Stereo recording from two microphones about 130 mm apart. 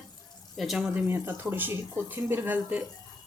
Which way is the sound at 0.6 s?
5° right (ahead or behind).